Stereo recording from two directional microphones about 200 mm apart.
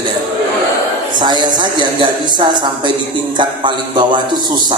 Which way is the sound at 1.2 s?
20° right (ahead or behind).